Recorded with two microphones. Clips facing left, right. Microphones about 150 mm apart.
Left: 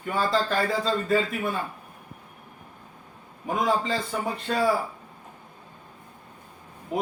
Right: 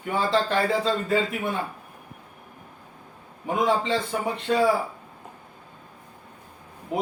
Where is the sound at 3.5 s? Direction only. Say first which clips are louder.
Right 2 dB; 25° right (ahead or behind).